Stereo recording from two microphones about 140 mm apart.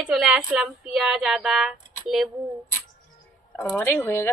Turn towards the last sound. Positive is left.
turn(degrees=15)  # may be behind; listen again after turning